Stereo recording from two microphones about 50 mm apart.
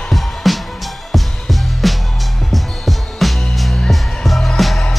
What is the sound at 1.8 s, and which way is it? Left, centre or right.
Music, centre.